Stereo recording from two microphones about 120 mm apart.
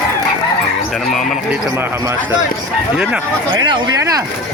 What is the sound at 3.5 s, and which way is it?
Speech, 40° right (ahead or behind).